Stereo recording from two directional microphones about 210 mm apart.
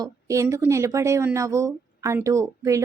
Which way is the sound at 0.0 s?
15° right (ahead or behind).